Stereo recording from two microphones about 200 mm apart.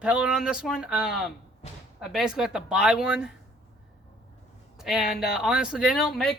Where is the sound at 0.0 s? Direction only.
5° right (ahead or behind).